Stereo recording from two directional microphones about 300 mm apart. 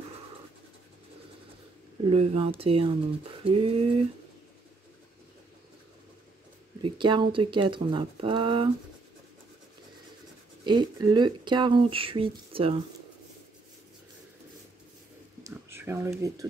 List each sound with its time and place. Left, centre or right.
2.0 s speech: centre
6.8 s speech: centre
10.6 s speech: centre
15.4 s a sound: centre